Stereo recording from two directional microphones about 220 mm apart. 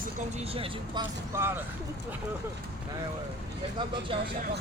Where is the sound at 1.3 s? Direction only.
10° right (ahead or behind).